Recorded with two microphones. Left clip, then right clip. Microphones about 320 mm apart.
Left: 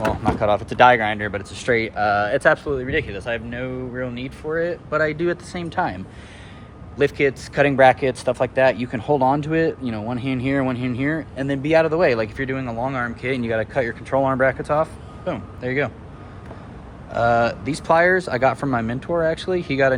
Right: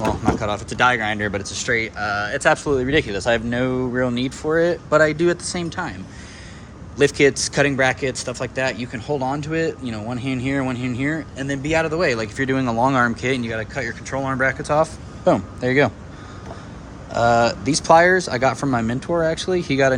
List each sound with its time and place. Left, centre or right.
0.0 s speech: centre
2.6 s speech: centre
17.1 s speech: centre